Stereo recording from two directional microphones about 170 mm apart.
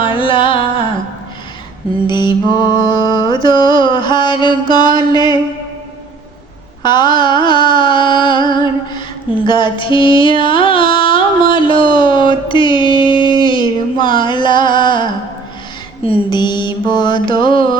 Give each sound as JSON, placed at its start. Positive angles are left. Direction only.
{"t": 0.0, "sound": "carnatic music", "side_deg": 30}
{"t": 2.0, "sound": "mantra", "side_deg": 25}
{"t": 6.8, "sound": "a sound", "side_deg": 25}
{"t": 16.0, "sound": "mantra", "side_deg": 25}